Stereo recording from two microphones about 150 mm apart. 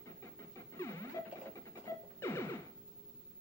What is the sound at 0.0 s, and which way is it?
Vehicle, 20° left (ahead or behind).